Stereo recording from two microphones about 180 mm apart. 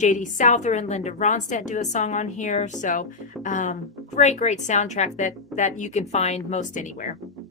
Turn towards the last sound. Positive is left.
turn(degrees=45)  # may be behind; listen again after turning